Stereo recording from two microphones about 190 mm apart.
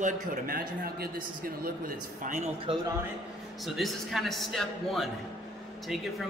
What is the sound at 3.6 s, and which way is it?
A man's voice, centre (ahead or behind).